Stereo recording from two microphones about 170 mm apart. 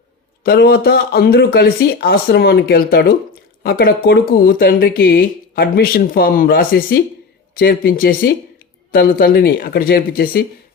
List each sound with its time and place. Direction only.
0.4 s speech: 65° left (ahead or behind)